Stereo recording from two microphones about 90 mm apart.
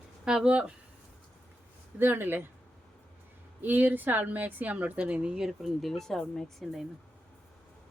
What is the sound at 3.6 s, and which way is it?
A woman's voice, 20° right (ahead or behind).